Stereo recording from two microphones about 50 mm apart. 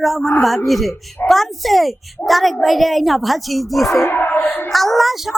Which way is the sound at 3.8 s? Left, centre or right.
Left.